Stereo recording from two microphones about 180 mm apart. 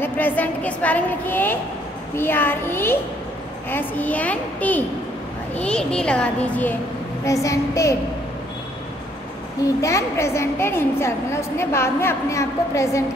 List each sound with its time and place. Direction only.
0.0 s a woman's voice: 10° left (ahead or behind)
9.8 s a woman's voice: 15° left (ahead or behind)